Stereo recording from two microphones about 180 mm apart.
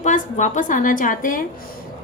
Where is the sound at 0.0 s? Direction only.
45° left (ahead or behind).